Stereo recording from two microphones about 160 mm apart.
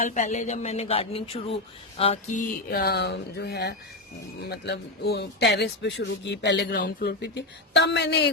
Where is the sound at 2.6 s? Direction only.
85° left.